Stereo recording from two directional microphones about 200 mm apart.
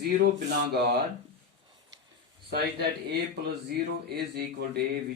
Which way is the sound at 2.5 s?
55° right (ahead or behind).